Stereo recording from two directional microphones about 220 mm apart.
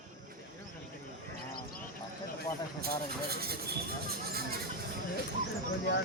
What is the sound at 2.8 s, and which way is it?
Speech, 45° right (ahead or behind).